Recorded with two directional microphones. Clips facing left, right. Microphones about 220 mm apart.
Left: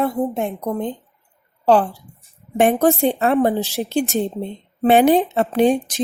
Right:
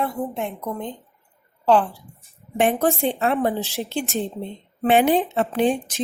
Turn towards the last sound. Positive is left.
turn(degrees=40)  # may be behind; listen again after turning